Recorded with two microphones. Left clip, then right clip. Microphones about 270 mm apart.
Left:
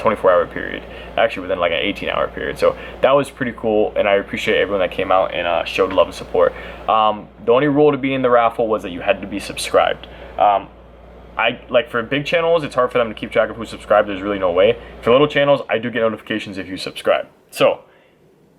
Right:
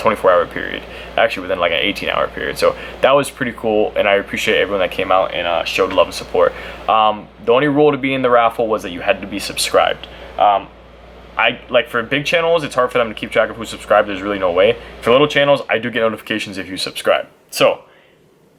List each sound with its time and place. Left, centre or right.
0.0 s speech: centre
3.6 s speech: left
3.9 s speech: centre